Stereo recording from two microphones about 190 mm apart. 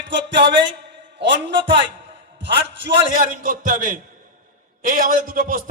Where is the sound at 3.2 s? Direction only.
45° right (ahead or behind).